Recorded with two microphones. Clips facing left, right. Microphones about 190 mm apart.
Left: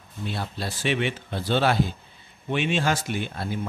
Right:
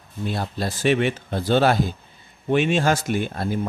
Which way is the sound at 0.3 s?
45° right (ahead or behind).